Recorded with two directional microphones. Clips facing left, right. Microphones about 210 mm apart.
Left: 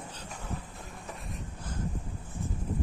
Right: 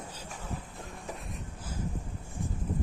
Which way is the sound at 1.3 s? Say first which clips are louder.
Left 1 dB; 5° right (ahead or behind).